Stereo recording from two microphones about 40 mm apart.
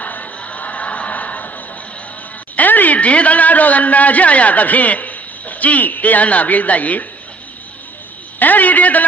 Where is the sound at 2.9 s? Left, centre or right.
Left.